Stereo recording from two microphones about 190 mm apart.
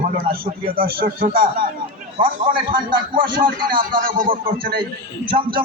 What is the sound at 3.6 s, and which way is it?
A man's voice, 50° right (ahead or behind).